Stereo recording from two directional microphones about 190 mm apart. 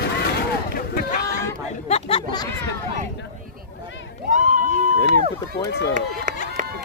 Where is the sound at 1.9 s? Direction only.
30° left (ahead or behind).